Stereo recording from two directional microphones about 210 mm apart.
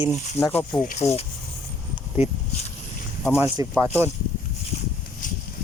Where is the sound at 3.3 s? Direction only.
10° right (ahead or behind).